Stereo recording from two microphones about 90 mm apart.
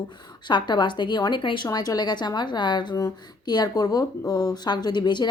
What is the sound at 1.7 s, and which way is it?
A woman's voice, 45° left (ahead or behind).